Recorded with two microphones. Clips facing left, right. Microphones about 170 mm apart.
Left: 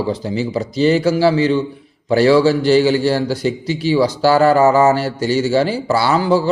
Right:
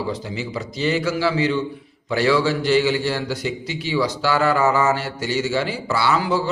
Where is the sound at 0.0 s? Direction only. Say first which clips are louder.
Left 7 dB; 35° left (ahead or behind).